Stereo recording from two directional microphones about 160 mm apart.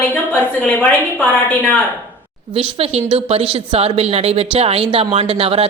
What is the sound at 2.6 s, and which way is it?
Speech, 40° right (ahead or behind).